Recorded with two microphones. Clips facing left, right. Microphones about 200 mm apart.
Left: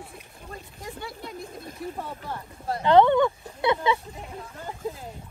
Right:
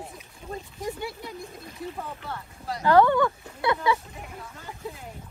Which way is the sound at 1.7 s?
50° left (ahead or behind).